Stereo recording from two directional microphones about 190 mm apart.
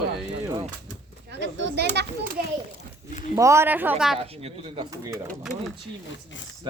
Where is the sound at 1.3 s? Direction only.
70° right (ahead or behind).